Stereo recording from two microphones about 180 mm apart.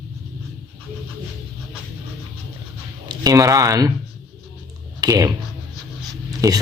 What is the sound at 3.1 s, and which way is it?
Speech, 20° right (ahead or behind).